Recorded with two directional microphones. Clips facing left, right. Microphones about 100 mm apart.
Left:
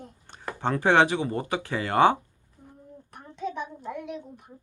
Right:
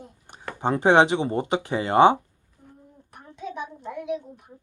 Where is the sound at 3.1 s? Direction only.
Centre (ahead or behind).